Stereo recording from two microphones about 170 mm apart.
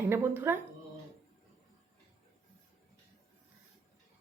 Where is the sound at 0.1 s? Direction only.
15° right (ahead or behind).